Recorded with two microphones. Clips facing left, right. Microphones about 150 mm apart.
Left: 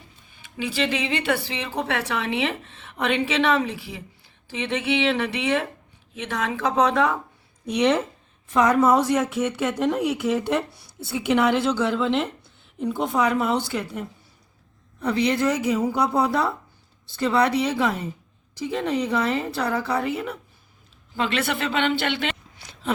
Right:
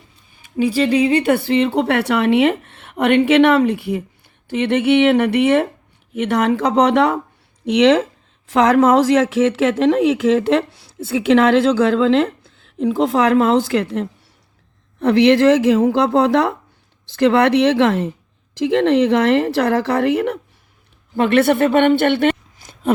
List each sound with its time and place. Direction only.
0.5 s speech: 35° right (ahead or behind)
1.5 s speech: 60° right (ahead or behind)
6.1 s speech: 70° right (ahead or behind)
7.6 s a woman's voice: 90° right; by 20.4 s 70° right (ahead or behind)
21.2 s speech: 55° right (ahead or behind)